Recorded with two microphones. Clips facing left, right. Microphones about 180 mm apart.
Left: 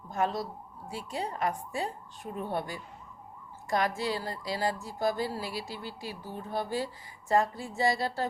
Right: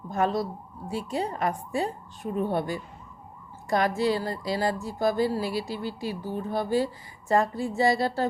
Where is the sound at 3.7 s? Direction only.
60° right (ahead or behind).